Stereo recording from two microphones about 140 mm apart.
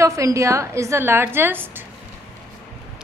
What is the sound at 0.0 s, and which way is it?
A woman's voice, 20° right (ahead or behind).